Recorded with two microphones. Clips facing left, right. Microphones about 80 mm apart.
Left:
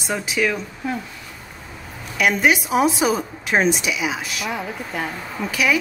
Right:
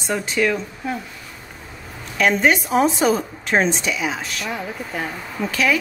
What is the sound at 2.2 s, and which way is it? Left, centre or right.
A woman's voice, centre.